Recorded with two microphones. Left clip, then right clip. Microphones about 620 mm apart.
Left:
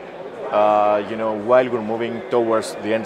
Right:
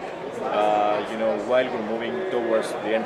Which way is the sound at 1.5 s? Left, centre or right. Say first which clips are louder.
Left 6 dB; left.